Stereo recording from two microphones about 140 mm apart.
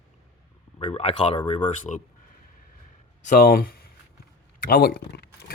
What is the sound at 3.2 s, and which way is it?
Speech, 85° left.